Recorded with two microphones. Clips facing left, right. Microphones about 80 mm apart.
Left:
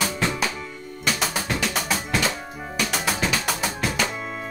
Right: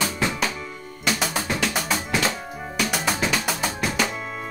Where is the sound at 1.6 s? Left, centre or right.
Centre.